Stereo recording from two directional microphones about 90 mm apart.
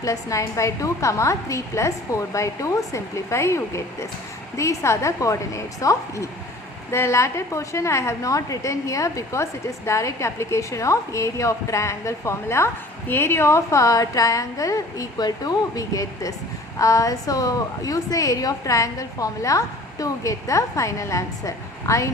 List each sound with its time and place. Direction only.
0.0 s a woman's voice: 40° left (ahead or behind)